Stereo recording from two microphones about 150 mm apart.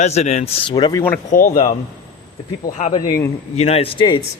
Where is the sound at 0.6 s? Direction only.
30° left (ahead or behind).